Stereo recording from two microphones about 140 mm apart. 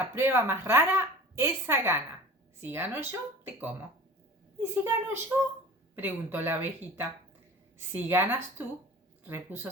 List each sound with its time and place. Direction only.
0.0 s a woman's voice: 15° right (ahead or behind)